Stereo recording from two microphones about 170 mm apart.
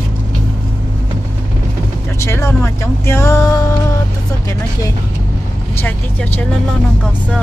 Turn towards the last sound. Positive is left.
turn(degrees=10)  # may be behind; listen again after turning